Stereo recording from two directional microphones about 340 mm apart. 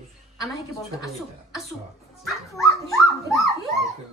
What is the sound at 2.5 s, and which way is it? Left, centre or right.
Speech, centre.